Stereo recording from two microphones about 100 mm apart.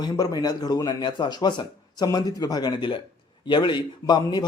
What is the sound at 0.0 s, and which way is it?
A man's voice, 40° left (ahead or behind).